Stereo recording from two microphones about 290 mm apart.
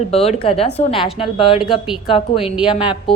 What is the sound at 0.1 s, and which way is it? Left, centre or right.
Speech, left.